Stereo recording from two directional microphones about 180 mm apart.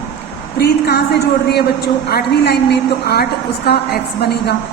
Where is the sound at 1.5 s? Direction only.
65° left (ahead or behind).